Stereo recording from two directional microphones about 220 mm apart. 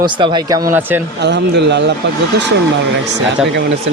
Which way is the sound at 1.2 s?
50° right (ahead or behind).